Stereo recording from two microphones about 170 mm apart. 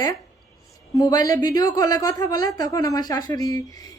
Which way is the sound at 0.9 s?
20° left (ahead or behind).